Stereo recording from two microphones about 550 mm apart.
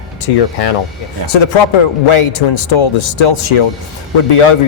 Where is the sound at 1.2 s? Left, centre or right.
Left.